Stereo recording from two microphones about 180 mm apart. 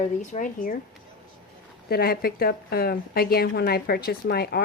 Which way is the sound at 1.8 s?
60° left (ahead or behind).